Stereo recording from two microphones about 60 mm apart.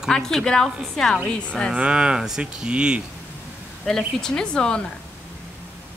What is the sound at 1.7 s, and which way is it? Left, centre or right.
Speech, centre.